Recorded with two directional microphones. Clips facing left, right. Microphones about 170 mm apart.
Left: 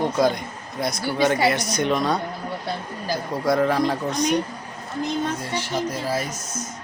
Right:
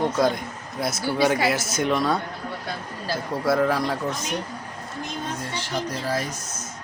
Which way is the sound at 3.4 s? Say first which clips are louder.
Left 2 dB; centre (ahead or behind).